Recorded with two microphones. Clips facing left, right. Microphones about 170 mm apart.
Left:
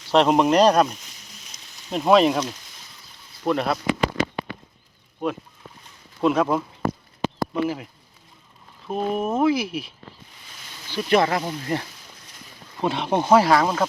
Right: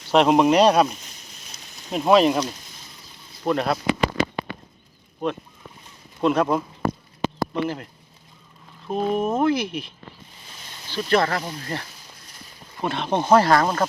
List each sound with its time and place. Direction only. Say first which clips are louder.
0.1 s speech: right 1 dB; 5° right (ahead or behind)
5.2 s speech: even; 5° left (ahead or behind)
8.9 s speech: right 1 dB; 5° left (ahead or behind)
10.9 s speech: left 1 dB; 15° left (ahead or behind)